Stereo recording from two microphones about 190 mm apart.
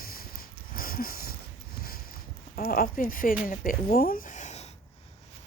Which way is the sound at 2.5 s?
50° left (ahead or behind).